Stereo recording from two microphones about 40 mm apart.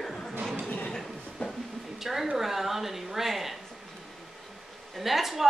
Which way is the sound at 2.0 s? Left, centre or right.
Centre.